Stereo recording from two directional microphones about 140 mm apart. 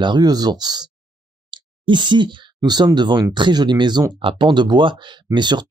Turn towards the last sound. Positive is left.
turn(degrees=-30)  # may be behind; listen again after turning